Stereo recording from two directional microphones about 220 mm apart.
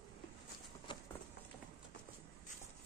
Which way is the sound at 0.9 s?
20° left (ahead or behind).